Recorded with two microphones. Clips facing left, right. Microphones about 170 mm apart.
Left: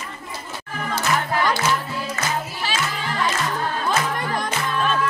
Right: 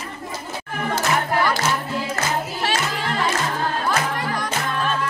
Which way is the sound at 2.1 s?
60° right (ahead or behind).